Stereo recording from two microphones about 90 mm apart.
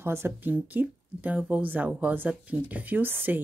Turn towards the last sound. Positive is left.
turn(degrees=-20)  # may be behind; listen again after turning